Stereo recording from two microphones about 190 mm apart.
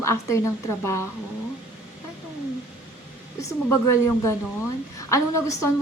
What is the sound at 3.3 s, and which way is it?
Speech, 15° left (ahead or behind).